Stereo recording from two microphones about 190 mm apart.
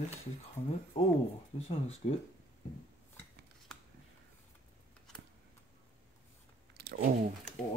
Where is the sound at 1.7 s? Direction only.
30° left (ahead or behind).